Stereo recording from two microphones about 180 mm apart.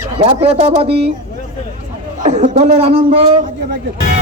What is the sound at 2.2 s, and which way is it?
Speech, 40° right (ahead or behind).